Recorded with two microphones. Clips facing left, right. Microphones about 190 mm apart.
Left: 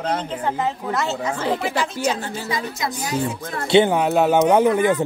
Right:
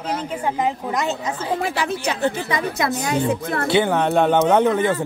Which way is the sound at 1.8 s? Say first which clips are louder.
Right 2 dB; 60° right (ahead or behind).